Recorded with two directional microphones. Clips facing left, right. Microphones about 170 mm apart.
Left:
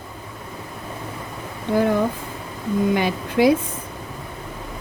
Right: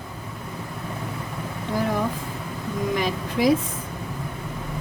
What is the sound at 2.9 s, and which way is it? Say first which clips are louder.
Speech: left 4 dB; 70° left (ahead or behind).